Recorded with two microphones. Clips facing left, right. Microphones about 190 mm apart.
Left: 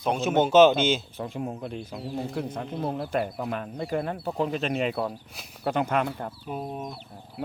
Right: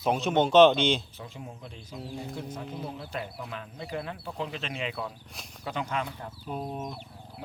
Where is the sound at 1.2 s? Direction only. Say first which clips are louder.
Left 10 dB; 60° left (ahead or behind).